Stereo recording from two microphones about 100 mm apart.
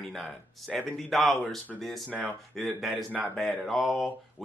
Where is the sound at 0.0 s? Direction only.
Centre (ahead or behind).